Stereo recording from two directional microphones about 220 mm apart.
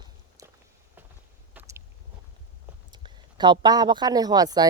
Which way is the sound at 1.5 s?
10° right (ahead or behind).